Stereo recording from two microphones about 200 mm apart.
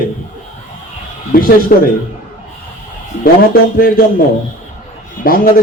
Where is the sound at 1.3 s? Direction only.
45° left (ahead or behind).